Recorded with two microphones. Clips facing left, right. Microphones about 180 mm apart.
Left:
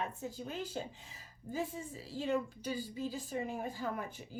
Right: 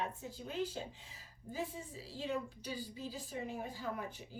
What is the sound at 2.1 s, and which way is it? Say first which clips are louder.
A woman's voice: left 5 dB; 45° left (ahead or behind).